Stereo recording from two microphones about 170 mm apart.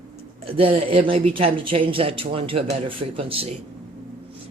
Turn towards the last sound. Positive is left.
turn(degrees=-35)  # may be behind; listen again after turning